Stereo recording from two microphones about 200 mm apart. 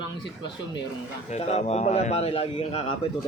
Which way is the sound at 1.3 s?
35° left (ahead or behind).